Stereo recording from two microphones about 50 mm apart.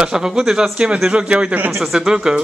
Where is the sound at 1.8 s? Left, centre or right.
Centre.